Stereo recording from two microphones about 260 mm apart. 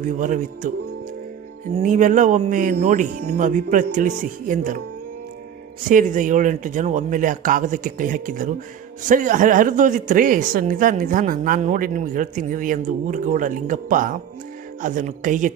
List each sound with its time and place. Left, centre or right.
0.2 s speech: right
1.8 s speech: right
5.9 s speech: right